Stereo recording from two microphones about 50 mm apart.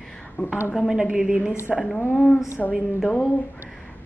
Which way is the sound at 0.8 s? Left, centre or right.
Centre.